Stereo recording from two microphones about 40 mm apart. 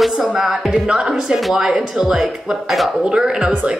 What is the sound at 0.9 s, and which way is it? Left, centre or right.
A woman's voice, centre.